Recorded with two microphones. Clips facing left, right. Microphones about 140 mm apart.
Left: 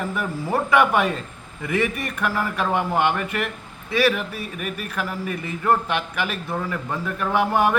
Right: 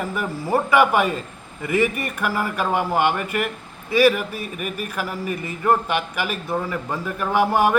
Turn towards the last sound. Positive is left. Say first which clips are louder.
# right 1 dB
turn(degrees=-10)  # may be behind; listen again after turning